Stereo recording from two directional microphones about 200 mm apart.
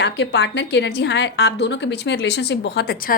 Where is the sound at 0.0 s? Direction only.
60° left (ahead or behind).